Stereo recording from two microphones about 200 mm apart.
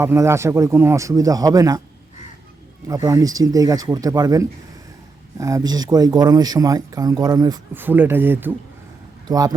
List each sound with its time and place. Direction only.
0.0 s speech: 15° right (ahead or behind)
2.8 s speech: 15° right (ahead or behind)